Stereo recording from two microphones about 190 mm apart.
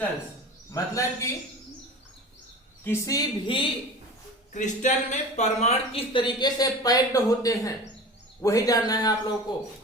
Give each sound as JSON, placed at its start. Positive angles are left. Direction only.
{"t": 0.7, "sound": "a man's voice", "side_deg": 15}
{"t": 2.8, "sound": "speech", "side_deg": 20}
{"t": 4.5, "sound": "speech", "side_deg": 40}